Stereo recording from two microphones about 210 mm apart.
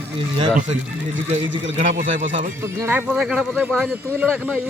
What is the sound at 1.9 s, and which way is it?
Speech, 40° right (ahead or behind).